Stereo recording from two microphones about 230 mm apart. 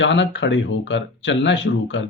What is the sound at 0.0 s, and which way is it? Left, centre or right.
Speech, left.